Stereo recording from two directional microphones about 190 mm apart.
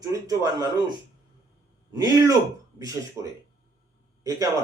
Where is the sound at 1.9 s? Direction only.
20° right (ahead or behind).